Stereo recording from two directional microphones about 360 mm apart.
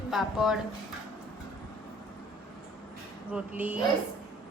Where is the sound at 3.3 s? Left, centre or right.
Centre.